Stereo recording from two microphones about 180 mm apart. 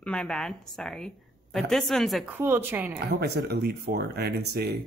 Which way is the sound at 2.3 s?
10° right (ahead or behind).